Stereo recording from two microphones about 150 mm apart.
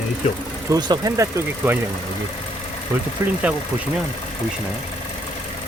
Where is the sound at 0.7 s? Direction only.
25° right (ahead or behind).